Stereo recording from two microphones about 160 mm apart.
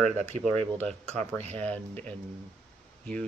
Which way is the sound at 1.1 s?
45° right (ahead or behind).